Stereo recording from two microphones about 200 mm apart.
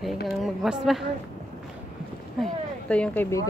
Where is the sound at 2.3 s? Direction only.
5° left (ahead or behind).